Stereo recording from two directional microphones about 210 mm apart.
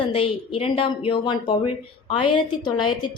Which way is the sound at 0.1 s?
25° left (ahead or behind).